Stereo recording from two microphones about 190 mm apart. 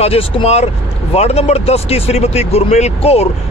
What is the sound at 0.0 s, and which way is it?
Speech, 35° left (ahead or behind).